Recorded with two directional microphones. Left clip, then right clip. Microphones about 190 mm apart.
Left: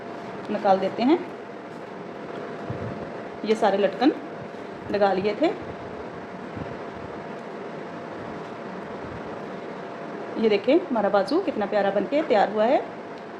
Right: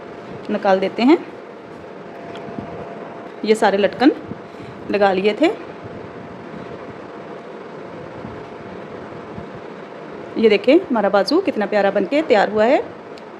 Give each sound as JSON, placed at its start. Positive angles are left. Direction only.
{"t": 0.6, "sound": "a woman's voice", "side_deg": -60}
{"t": 3.4, "sound": "a woman's voice", "side_deg": -60}
{"t": 10.3, "sound": "a woman's voice", "side_deg": -60}